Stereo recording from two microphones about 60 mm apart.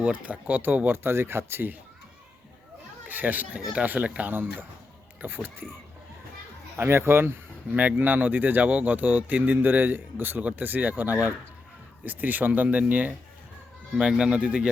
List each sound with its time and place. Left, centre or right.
0.0 s speech: right
3.1 s speech: right
5.2 s speech: right
6.7 s speech: right
7.7 s speech: right
14.0 s speech: centre